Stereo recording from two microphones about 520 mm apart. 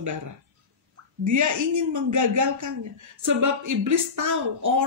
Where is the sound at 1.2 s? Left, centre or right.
Right.